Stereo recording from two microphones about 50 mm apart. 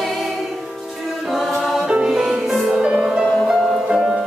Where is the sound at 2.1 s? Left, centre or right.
Centre.